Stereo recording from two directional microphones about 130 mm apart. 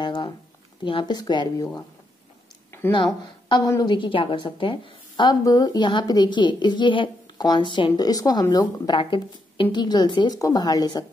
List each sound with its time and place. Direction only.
0.0 s a sound: 35° left (ahead or behind)
0.8 s a woman's voice: 35° left (ahead or behind)
3.4 s a woman's voice: 35° left (ahead or behind)